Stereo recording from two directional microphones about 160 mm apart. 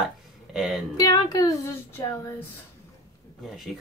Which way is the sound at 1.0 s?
25° left (ahead or behind).